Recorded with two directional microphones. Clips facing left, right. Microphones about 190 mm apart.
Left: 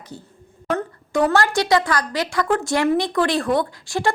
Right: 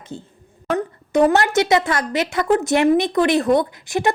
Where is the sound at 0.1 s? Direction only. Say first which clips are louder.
Right 6 dB; 20° right (ahead or behind).